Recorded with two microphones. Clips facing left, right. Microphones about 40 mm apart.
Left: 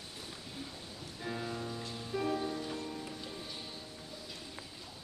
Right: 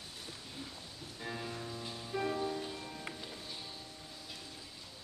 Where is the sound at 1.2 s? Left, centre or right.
Centre.